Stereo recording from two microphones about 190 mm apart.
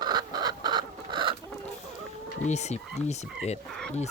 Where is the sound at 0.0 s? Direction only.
20° right (ahead or behind).